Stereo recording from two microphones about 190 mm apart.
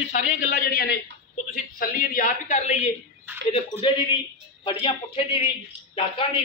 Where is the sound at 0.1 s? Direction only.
50° left (ahead or behind).